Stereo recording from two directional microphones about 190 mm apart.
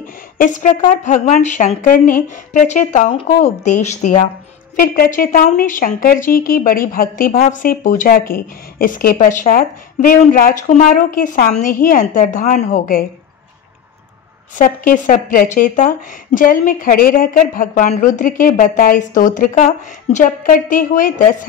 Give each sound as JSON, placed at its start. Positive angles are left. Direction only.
{"t": 0.0, "sound": "a woman's voice", "side_deg": 45}
{"t": 14.5, "sound": "a woman's voice", "side_deg": 45}